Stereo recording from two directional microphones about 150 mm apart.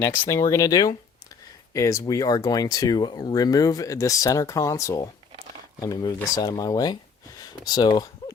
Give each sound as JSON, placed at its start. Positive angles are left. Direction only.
{"t": 0.0, "sound": "speech", "side_deg": 20}